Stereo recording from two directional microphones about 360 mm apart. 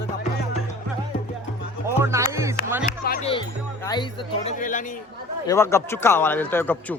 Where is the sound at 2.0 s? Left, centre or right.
Centre.